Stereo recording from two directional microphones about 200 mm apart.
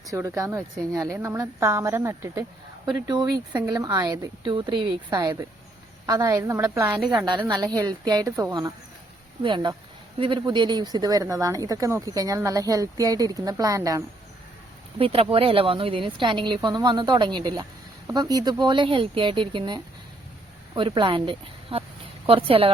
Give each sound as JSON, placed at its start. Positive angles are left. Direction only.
{"t": 0.0, "sound": "speech", "side_deg": -15}
{"t": 14.9, "sound": "speech", "side_deg": -30}